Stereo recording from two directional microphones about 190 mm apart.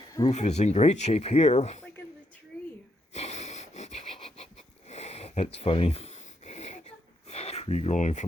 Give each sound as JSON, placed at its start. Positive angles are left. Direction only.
{"t": 0.3, "sound": "speech", "side_deg": 35}
{"t": 3.1, "sound": "wheeze", "side_deg": 35}